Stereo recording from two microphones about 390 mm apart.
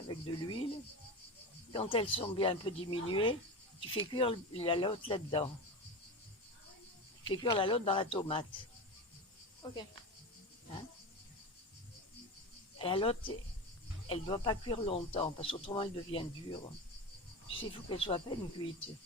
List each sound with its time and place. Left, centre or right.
0.1 s speech: centre
1.7 s speech: centre
7.3 s speech: centre
9.6 s speech: centre
12.8 s speech: centre